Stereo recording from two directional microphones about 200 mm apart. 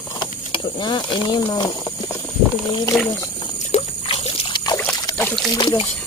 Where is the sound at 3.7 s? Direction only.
30° left (ahead or behind).